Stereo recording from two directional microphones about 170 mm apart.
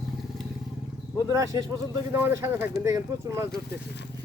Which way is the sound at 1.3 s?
20° right (ahead or behind).